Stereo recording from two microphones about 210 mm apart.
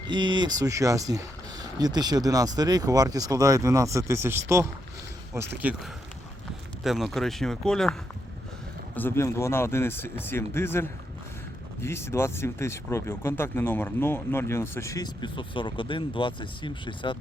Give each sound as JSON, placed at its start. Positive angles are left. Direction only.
{"t": 0.1, "sound": "speech", "side_deg": -20}
{"t": 9.0, "sound": "speech", "side_deg": 10}